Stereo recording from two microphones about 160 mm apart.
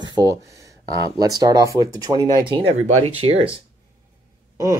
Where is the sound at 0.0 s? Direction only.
25° right (ahead or behind).